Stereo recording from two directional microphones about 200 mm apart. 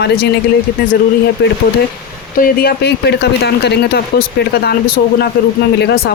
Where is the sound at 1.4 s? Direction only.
55° left (ahead or behind).